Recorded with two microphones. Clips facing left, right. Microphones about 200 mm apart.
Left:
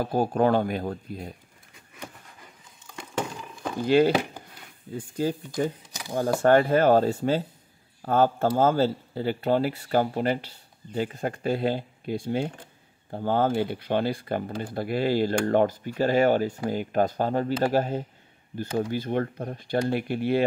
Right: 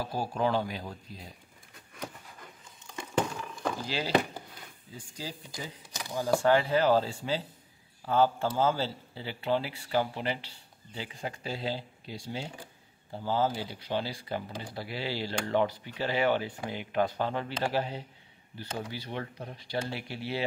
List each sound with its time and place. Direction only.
0.0 s speech: 55° left (ahead or behind)
3.8 s speech: 55° left (ahead or behind)